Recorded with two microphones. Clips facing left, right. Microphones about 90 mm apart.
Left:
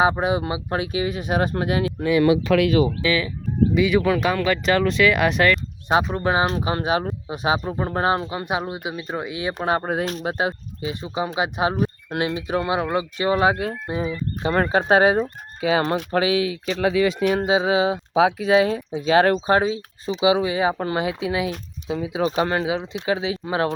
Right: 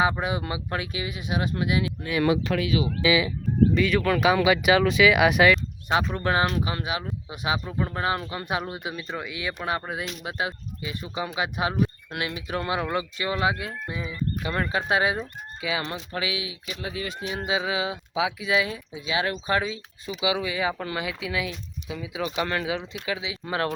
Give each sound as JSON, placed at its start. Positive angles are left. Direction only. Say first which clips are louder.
{"t": 0.0, "sound": "speech", "louder": "left 5 dB", "side_deg": 25}
{"t": 1.0, "sound": "speech", "louder": "left 7 dB", "side_deg": 45}
{"t": 3.0, "sound": "speech", "louder": "even", "side_deg": -10}
{"t": 3.8, "sound": "speech", "louder": "left 4 dB", "side_deg": 10}
{"t": 4.2, "sound": "speech", "louder": "right 1 dB", "side_deg": -10}
{"t": 5.9, "sound": "speech", "louder": "left 4 dB", "side_deg": 25}
{"t": 6.4, "sound": "speech", "louder": "left 4 dB", "side_deg": 35}
{"t": 13.3, "sound": "speech", "louder": "left 6 dB", "side_deg": 40}
{"t": 16.8, "sound": "speech", "louder": "left 14 dB", "side_deg": 90}
{"t": 17.4, "sound": "speech", "louder": "left 5 dB", "side_deg": 30}
{"t": 19.5, "sound": "speech", "louder": "left 7 dB", "side_deg": 35}
{"t": 23.5, "sound": "speech", "louder": "left 3 dB", "side_deg": 20}